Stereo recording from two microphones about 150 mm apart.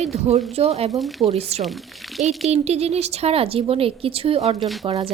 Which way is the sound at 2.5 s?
45° right (ahead or behind).